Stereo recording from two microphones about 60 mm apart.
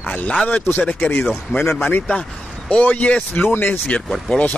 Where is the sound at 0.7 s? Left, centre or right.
Left.